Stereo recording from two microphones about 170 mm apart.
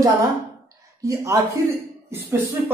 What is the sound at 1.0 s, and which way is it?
Speech, 20° right (ahead or behind).